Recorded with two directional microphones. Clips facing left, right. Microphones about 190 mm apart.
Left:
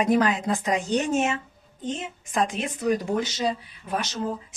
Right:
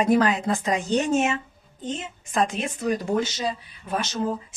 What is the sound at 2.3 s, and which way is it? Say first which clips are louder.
A woman's voice: right 1 dB; 15° left (ahead or behind).